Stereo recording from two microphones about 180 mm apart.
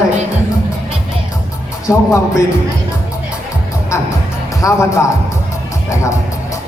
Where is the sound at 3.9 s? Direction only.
15° left (ahead or behind).